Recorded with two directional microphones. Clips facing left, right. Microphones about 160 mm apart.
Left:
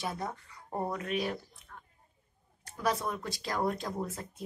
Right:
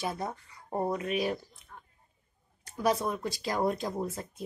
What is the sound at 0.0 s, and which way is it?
Speech, 15° right (ahead or behind).